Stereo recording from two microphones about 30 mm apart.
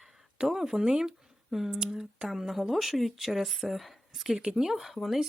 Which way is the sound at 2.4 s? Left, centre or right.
Centre.